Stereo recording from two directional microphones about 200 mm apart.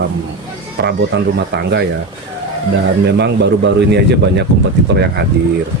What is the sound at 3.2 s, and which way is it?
Speech, 60° right (ahead or behind).